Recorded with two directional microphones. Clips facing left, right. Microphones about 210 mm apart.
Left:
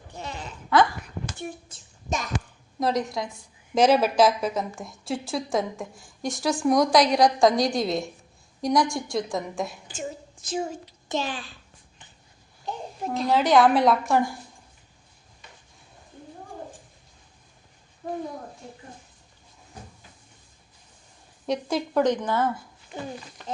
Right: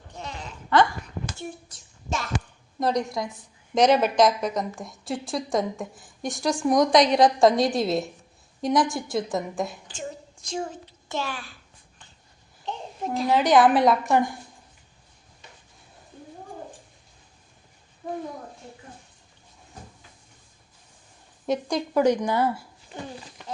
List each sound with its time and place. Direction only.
0.2 s a sound: 5° left (ahead or behind)
2.0 s a sound: 15° left (ahead or behind)
2.7 s a woman's voice: centre (ahead or behind); by 11.5 s 20° left (ahead or behind)
12.6 s a child's voice: 5° left (ahead or behind)
21.4 s a woman's voice: centre (ahead or behind)
22.0 s speech: 10° right (ahead or behind)